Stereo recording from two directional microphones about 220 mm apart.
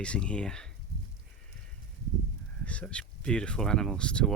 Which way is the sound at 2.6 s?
5° left (ahead or behind).